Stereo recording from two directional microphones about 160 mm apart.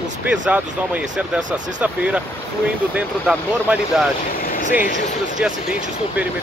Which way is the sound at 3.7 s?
10° right (ahead or behind).